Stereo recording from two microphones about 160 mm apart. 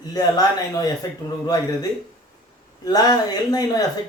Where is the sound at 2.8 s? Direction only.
25° left (ahead or behind).